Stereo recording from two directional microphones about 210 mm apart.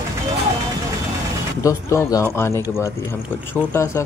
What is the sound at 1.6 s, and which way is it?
Speech, 15° left (ahead or behind).